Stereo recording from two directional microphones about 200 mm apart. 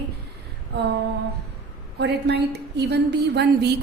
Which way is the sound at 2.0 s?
55° right (ahead or behind).